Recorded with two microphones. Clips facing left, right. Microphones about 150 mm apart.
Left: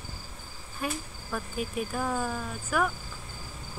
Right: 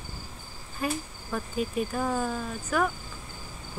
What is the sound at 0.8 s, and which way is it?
Speech, 5° left (ahead or behind).